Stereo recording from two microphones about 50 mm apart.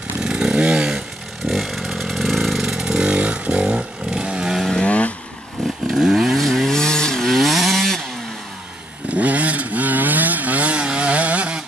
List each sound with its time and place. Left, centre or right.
0.2 s chainsaw: centre
1.4 s motorcycle: centre
4.8 s vehicle: left
5.9 s chainsaw: centre
9.1 s vehicle: right